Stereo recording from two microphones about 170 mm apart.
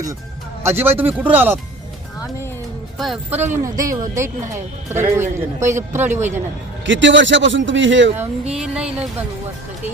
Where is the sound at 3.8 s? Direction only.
20° right (ahead or behind).